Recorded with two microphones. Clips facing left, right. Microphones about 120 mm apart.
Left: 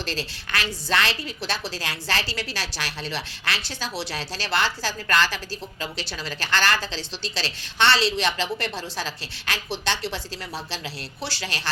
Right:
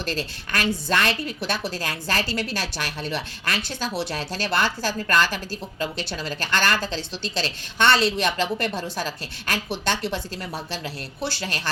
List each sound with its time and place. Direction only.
0.0 s a woman's voice: 50° right (ahead or behind)